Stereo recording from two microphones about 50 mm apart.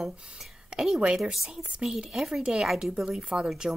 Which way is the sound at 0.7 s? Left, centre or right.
Right.